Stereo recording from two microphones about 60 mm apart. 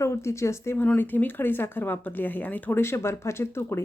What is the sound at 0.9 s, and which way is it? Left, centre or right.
Speech, left.